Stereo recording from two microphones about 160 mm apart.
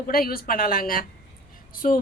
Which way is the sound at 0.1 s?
65° left (ahead or behind).